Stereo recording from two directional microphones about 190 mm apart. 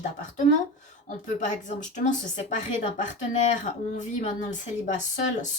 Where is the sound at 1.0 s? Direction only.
40° left (ahead or behind).